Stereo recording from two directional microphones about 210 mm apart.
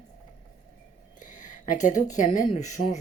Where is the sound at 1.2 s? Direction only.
35° left (ahead or behind).